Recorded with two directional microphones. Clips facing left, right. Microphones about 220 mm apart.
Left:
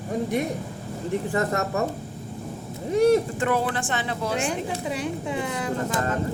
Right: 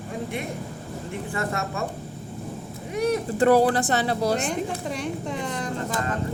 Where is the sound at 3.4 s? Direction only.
35° right (ahead or behind).